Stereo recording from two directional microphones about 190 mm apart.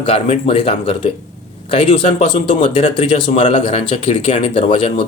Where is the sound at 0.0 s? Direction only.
30° left (ahead or behind).